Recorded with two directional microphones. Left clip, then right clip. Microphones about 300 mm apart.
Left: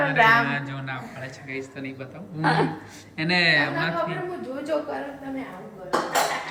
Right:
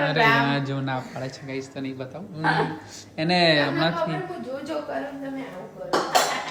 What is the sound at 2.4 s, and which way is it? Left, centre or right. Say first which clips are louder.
Speech: even; left.